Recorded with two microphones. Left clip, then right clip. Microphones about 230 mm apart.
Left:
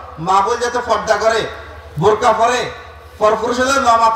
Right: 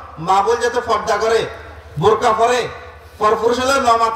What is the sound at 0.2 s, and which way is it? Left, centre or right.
A man's voice, right.